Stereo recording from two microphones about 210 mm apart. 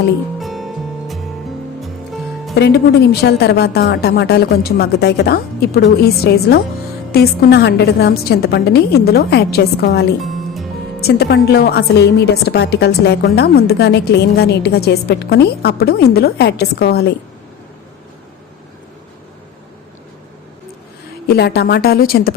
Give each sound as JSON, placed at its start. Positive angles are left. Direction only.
{"t": 0.3, "sound": "music", "side_deg": 0}
{"t": 2.6, "sound": "a woman's voice", "side_deg": 50}
{"t": 21.2, "sound": "a woman's voice", "side_deg": 50}